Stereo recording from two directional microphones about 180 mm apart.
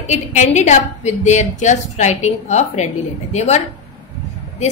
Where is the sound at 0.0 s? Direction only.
40° left (ahead or behind).